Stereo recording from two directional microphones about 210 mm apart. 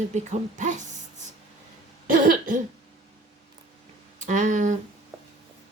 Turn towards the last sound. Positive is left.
turn(degrees=-35)  # may be behind; listen again after turning